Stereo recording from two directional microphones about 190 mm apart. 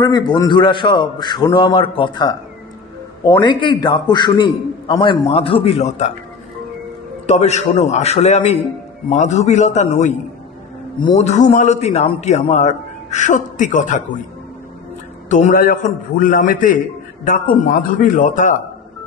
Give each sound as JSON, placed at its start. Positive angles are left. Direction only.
{"t": 0.0, "sound": "a man's voice", "side_deg": 20}
{"t": 7.2, "sound": "a man's voice", "side_deg": 35}
{"t": 11.1, "sound": "a man's voice", "side_deg": 35}
{"t": 15.2, "sound": "a man's voice", "side_deg": 40}